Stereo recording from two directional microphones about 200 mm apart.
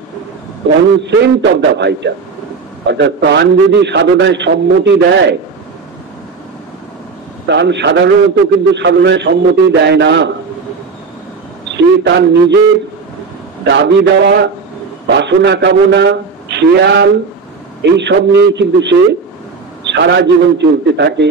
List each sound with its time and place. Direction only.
1.0 s a man's voice: 60° right (ahead or behind)
7.4 s a man's voice: 60° right (ahead or behind)
11.7 s a man's voice: 60° right (ahead or behind)
13.7 s a man's voice: 60° right (ahead or behind)